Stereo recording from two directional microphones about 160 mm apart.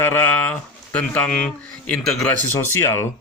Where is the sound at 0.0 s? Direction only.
10° left (ahead or behind).